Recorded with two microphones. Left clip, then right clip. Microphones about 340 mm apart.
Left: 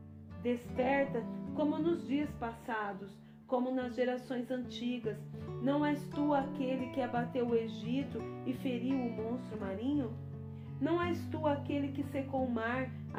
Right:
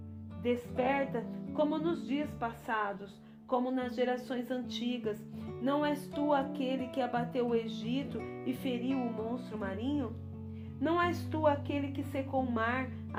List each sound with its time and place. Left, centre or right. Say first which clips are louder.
0.4 s speech: right 2 dB; centre